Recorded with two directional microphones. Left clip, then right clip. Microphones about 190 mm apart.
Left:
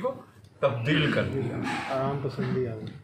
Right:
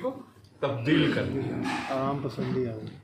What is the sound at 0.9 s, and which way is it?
A man's voice, 15° right (ahead or behind).